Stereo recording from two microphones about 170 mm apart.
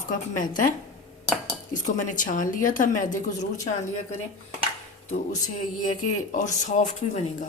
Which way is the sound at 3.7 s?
35° left (ahead or behind).